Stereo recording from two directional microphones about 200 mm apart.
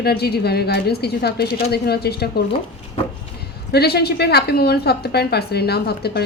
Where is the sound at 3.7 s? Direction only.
55° left (ahead or behind).